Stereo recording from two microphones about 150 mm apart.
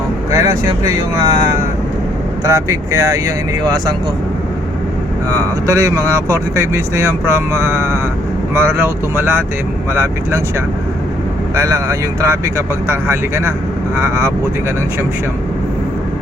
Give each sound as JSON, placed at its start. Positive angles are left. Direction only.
{"t": 0.3, "sound": "speech", "side_deg": -20}
{"t": 5.3, "sound": "speech", "side_deg": -20}
{"t": 11.5, "sound": "speech", "side_deg": -20}